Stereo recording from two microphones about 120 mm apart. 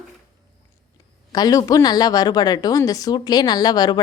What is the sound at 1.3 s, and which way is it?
A woman's voice, 30° left (ahead or behind).